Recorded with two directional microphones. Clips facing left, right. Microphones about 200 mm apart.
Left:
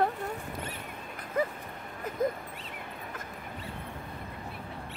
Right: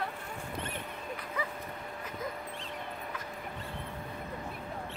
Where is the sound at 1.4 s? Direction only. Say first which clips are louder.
Left 9 dB; 50° left (ahead or behind).